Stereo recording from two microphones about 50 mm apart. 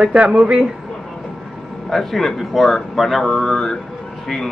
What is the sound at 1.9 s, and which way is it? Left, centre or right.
Speech, centre.